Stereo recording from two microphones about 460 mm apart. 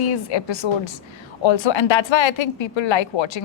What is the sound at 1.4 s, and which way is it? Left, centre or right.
A woman's voice, left.